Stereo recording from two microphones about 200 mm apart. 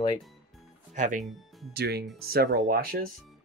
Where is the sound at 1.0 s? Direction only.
40° right (ahead or behind).